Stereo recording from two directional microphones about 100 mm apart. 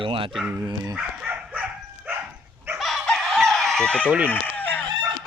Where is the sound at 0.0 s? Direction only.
60° right (ahead or behind).